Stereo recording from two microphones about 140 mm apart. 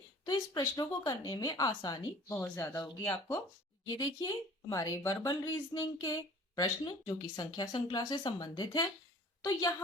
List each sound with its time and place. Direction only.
0.6 s speech: 25° left (ahead or behind)
2.3 s speech: 15° left (ahead or behind)
3.8 s speech: 30° left (ahead or behind)